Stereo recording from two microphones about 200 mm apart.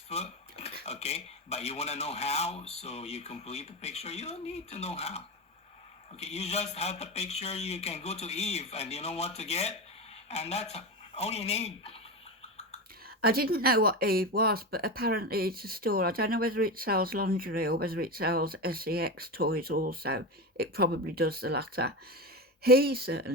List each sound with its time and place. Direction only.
0.1 s a sound: 30° left (ahead or behind)
0.9 s speech: 30° left (ahead or behind)
13.1 s speech: 50° right (ahead or behind)